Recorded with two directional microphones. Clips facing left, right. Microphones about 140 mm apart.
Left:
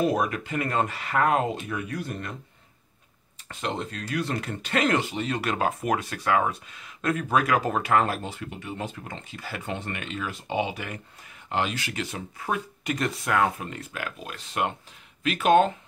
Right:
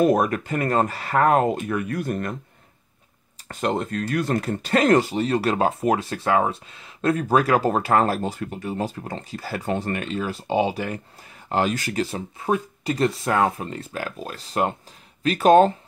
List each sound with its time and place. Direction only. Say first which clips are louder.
0.0 s speech: right 6 dB; 50° right (ahead or behind)
3.4 s speech: right 7 dB; 50° right (ahead or behind)